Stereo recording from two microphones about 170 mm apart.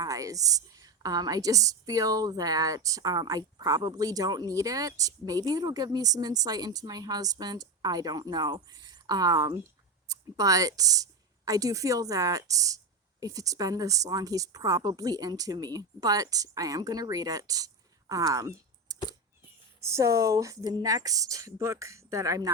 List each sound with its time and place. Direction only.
0.0 s a woman's voice: 20° right (ahead or behind)